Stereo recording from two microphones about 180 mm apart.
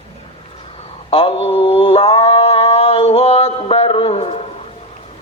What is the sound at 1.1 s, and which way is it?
Mantra, 30° left (ahead or behind).